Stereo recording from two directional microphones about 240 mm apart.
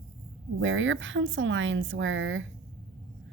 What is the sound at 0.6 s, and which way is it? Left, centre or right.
A woman's voice, right.